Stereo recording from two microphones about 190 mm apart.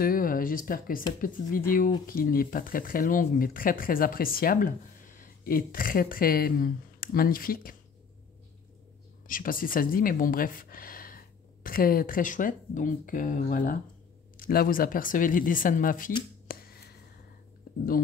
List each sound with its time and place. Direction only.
0.0 s speech: 50° left (ahead or behind)
9.3 s speech: 45° left (ahead or behind)
16.4 s a sound: 55° left (ahead or behind)